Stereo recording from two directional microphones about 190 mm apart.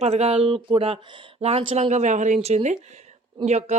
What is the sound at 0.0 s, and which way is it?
Speech, 35° right (ahead or behind).